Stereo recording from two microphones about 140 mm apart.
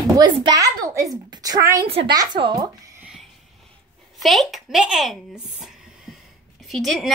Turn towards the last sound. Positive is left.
turn(degrees=0)  # may be behind; listen again after turning